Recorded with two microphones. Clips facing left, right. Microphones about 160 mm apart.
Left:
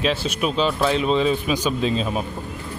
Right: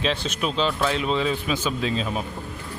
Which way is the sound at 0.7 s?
25° left (ahead or behind).